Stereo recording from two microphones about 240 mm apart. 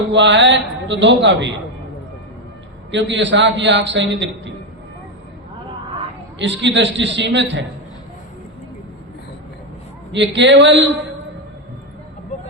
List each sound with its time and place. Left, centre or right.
0.1 s a man's voice: right
2.9 s a man's voice: right
6.4 s a man's voice: right
10.1 s a man's voice: right